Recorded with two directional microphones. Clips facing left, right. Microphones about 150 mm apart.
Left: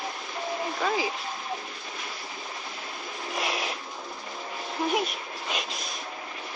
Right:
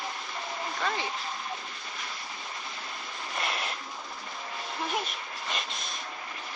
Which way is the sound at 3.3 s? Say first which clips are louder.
Left 3 dB; 5° left (ahead or behind).